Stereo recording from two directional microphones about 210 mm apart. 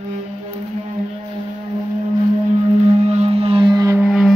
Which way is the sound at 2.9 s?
30° right (ahead or behind).